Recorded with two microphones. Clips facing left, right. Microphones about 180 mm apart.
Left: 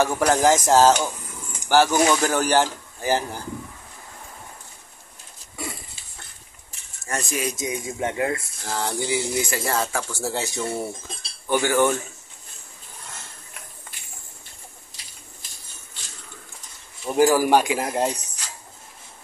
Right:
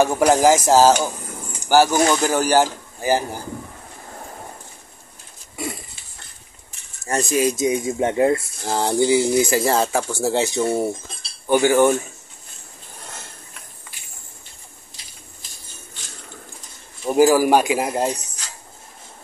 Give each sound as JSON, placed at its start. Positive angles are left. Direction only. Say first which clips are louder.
{"t": 0.0, "sound": "speech", "louder": "right 4 dB", "side_deg": -15}
{"t": 7.1, "sound": "speech", "louder": "right 8 dB", "side_deg": -30}
{"t": 17.0, "sound": "speech", "louder": "right 3 dB", "side_deg": -15}